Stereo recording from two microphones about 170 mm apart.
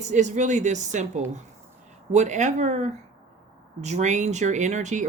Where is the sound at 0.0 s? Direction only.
45° right (ahead or behind).